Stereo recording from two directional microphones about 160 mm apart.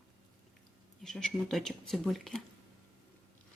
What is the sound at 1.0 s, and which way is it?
Speech, centre (ahead or behind).